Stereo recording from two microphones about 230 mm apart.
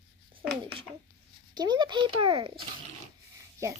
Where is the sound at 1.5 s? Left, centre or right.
Centre.